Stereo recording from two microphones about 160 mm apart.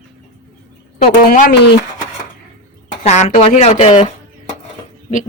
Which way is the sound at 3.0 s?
45° left (ahead or behind).